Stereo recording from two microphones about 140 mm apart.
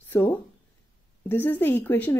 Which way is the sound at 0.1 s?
15° left (ahead or behind).